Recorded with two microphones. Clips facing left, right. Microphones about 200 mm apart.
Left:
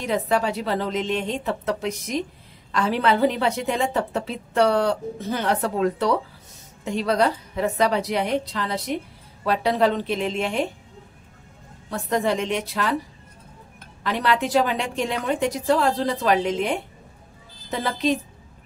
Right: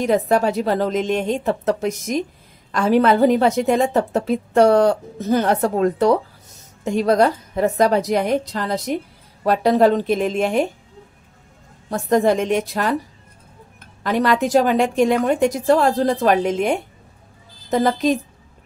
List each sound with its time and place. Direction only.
0.0 s a woman's voice: 45° right (ahead or behind)
11.9 s a woman's voice: 45° right (ahead or behind)
14.0 s a woman's voice: 45° right (ahead or behind)